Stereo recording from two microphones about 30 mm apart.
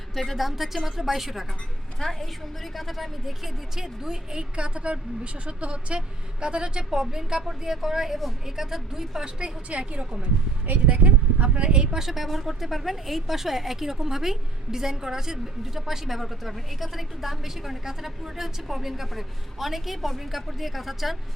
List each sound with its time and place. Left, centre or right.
0.1 s a woman's voice: centre
2.0 s a woman's voice: centre
3.8 s speech: centre
4.5 s a woman's voice: right; by 9.2 s centre
9.6 s a woman's voice: right
10.8 s speech: right
11.9 s a woman's voice: centre